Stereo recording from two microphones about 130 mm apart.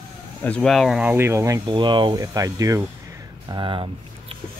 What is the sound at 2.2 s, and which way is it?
Speech, 25° right (ahead or behind).